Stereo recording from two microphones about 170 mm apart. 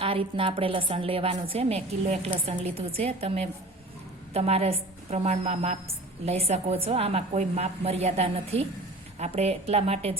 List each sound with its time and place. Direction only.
0.0 s a woman's voice: 30° right (ahead or behind)